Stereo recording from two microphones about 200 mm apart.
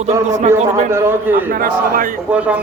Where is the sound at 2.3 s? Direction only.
5° right (ahead or behind).